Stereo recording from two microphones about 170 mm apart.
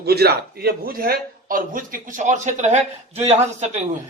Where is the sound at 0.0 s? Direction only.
70° right (ahead or behind).